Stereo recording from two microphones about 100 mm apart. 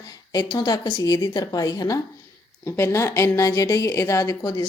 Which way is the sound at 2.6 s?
25° left (ahead or behind).